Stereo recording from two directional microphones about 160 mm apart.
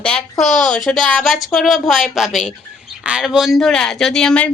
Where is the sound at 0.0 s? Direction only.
5° left (ahead or behind).